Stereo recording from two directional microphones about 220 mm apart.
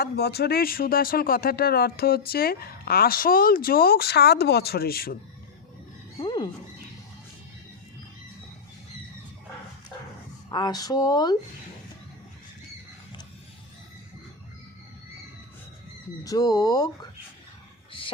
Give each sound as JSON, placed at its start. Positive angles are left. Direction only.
{"t": 0.0, "sound": "speech", "side_deg": 45}
{"t": 6.1, "sound": "wild animals", "side_deg": 20}
{"t": 10.5, "sound": "speech", "side_deg": 20}
{"t": 16.2, "sound": "speech", "side_deg": 15}